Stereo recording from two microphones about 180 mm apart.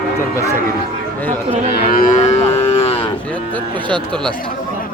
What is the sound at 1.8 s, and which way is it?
Livestock, 50° left (ahead or behind).